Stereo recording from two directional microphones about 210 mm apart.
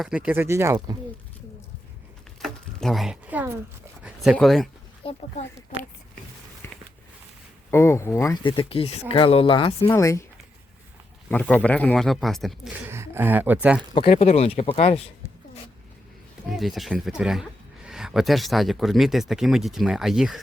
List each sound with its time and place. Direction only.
0.0 s speech: 5° right (ahead or behind)
2.4 s a sound: centre (ahead or behind)
4.0 s speech: centre (ahead or behind)
5.0 s speech: 25° left (ahead or behind)
6.6 s a sound: 10° left (ahead or behind)
7.7 s speech: 10° left (ahead or behind)
8.4 s speech: 25° left (ahead or behind)
9.9 s speech: 15° left (ahead or behind)
11.3 s speech: 5° left (ahead or behind)
12.9 s speech: 10° right (ahead or behind)
13.9 s speech: 25° left (ahead or behind)
16.5 s speech: centre (ahead or behind)